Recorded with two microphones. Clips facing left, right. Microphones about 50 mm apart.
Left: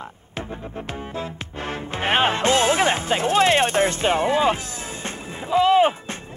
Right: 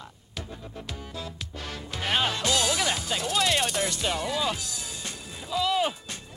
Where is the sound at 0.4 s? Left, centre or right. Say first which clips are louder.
Left 8 dB; left.